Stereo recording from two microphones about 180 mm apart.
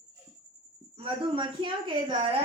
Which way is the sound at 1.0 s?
30° right (ahead or behind).